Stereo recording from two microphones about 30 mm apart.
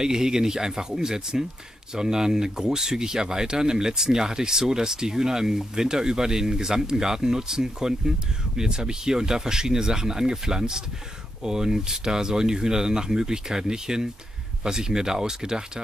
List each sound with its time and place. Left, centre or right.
0.0 s speech: right